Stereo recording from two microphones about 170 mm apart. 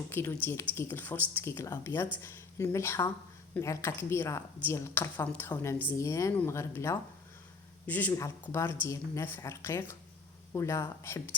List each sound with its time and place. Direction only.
0.1 s speech: 15° left (ahead or behind)